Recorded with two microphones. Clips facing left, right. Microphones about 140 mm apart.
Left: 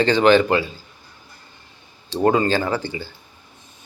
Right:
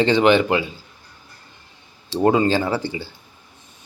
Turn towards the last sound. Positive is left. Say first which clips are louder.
# right 1 dB
turn(degrees=-25)  # may be behind; listen again after turning